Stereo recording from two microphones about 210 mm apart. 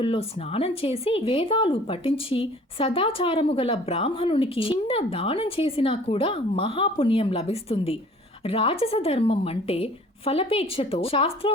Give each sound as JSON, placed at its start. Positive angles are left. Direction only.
{"t": 0.0, "sound": "speech", "side_deg": 25}